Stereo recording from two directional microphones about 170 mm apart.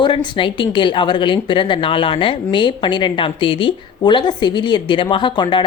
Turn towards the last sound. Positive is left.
turn(degrees=30)  # may be behind; listen again after turning